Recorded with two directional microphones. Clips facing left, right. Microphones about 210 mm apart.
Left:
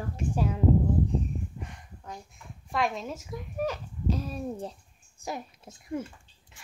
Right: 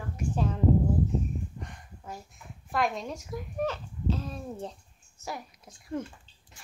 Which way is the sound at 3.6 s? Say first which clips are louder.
Left 1 dB; 10° left (ahead or behind).